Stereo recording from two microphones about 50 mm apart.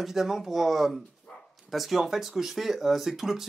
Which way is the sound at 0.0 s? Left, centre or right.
Centre.